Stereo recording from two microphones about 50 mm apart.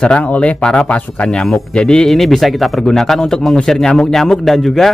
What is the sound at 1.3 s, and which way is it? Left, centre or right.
Speech, centre.